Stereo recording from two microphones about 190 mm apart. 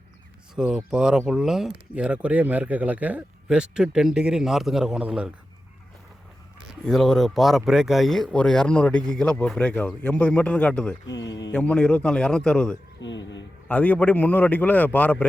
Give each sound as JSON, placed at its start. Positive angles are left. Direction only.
{"t": 0.5, "sound": "speech", "side_deg": -5}
{"t": 6.6, "sound": "speech", "side_deg": 0}
{"t": 11.1, "sound": "speech", "side_deg": 70}
{"t": 11.5, "sound": "speech", "side_deg": 5}
{"t": 13.0, "sound": "speech", "side_deg": 70}
{"t": 13.7, "sound": "a man's voice", "side_deg": 10}